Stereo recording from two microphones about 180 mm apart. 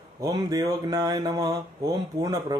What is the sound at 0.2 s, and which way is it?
Speech, 20° right (ahead or behind).